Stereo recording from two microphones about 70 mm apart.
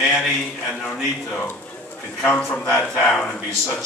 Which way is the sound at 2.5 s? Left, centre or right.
Centre.